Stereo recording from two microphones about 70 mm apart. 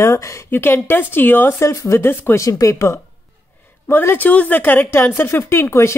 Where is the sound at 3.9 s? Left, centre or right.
Left.